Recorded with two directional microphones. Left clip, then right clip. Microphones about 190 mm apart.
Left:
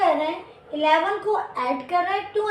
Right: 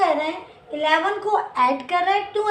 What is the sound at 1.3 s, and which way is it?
Speech, 30° right (ahead or behind).